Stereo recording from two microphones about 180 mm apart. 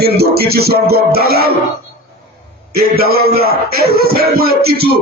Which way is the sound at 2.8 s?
55° right (ahead or behind).